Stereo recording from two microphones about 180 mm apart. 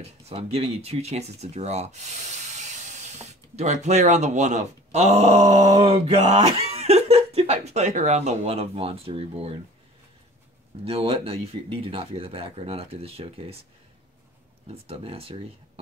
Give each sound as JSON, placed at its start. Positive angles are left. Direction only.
{"t": 0.0, "sound": "speech", "side_deg": -35}
{"t": 2.5, "sound": "steam", "side_deg": -40}
{"t": 3.5, "sound": "speech", "side_deg": -40}
{"t": 10.8, "sound": "speech", "side_deg": -35}
{"t": 14.7, "sound": "speech", "side_deg": -35}